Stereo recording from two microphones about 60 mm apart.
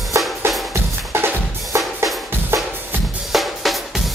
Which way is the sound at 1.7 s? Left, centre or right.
Right.